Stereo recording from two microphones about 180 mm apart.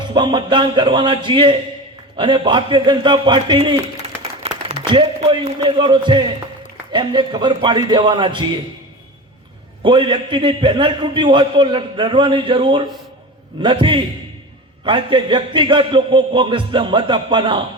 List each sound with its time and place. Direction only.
0.0 s a man's voice: 25° right (ahead or behind)
4.4 s a sound: 35° right (ahead or behind)
4.9 s a man's voice: 25° right (ahead or behind)
9.8 s a man's voice: 25° right (ahead or behind)